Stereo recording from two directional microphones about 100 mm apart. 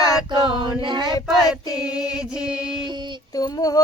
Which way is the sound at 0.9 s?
45° right (ahead or behind).